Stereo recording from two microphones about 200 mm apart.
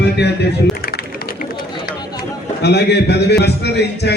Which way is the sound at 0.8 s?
50° left (ahead or behind).